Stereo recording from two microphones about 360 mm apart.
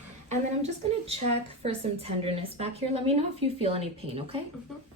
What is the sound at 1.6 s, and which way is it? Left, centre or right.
A woman's voice, centre.